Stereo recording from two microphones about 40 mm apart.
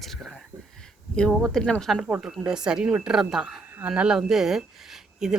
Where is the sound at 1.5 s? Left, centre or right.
Centre.